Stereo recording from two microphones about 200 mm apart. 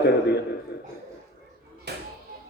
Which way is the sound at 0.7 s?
55° left (ahead or behind).